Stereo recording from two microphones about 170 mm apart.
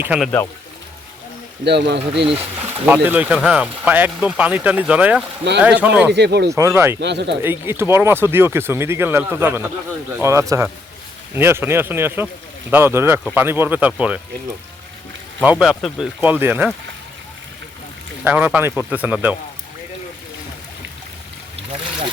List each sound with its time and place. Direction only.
0.0 s speech: 5° right (ahead or behind)
1.6 s speech: 85° right
2.4 s speech: 10° right (ahead or behind)
6.1 s speech: 85° right
6.5 s speech: 15° right (ahead or behind)
7.0 s speech: 90° right
7.7 s speech: 15° right (ahead or behind)
15.4 s speech: 5° right (ahead or behind)
16.2 s speech: 10° right (ahead or behind)
18.3 s speech: 10° right (ahead or behind)